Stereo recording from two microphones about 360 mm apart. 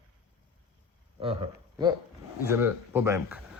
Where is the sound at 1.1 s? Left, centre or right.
Centre.